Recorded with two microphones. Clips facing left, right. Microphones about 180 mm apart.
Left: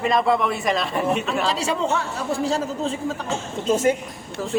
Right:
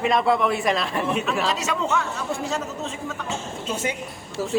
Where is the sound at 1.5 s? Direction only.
30° left (ahead or behind).